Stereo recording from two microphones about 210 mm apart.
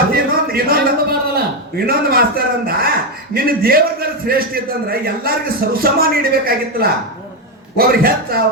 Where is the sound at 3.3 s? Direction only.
45° right (ahead or behind).